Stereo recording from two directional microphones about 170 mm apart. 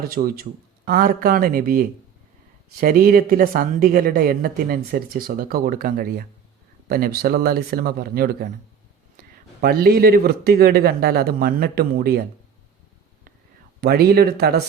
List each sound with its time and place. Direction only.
0.0 s speech: 60° right (ahead or behind)
13.8 s speech: 65° right (ahead or behind)